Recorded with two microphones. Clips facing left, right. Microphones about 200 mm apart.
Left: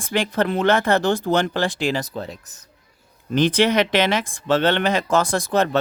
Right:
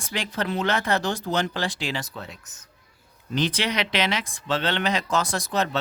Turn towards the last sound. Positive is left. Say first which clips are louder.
# left 6 dB
turn(degrees=50)  # may be behind; listen again after turning